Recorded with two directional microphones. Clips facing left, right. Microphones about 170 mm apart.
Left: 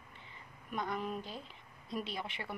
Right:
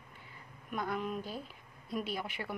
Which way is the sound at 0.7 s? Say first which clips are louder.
Right 2 dB; centre (ahead or behind).